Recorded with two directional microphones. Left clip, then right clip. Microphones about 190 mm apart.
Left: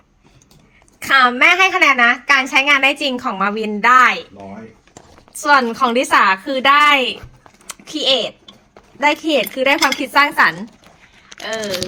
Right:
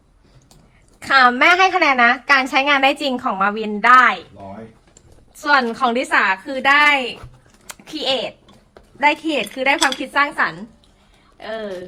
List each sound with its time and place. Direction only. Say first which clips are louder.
0.9 s a sound: left 1 dB; centre (ahead or behind)
1.2 s a woman's voice: even; 10° right (ahead or behind)
3.3 s a woman's voice: even; 10° left (ahead or behind)
5.5 s a woman's voice: left 3 dB; 10° left (ahead or behind)
7.7 s a sound: left 5 dB; 5° right (ahead or behind)
9.0 s a woman's voice: left 2 dB; 10° left (ahead or behind); by 10.5 s 25° left (ahead or behind)